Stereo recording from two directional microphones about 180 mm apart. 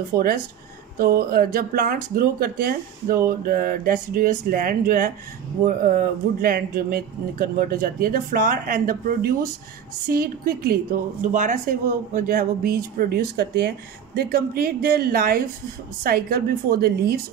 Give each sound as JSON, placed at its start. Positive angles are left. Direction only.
{"t": 0.1, "sound": "speech", "side_deg": -55}
{"t": 11.3, "sound": "speech", "side_deg": -45}